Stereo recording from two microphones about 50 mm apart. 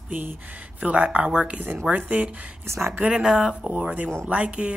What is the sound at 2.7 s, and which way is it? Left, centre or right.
Speech, right.